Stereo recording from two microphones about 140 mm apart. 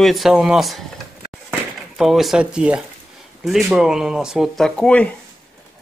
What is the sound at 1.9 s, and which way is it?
Speech, centre (ahead or behind).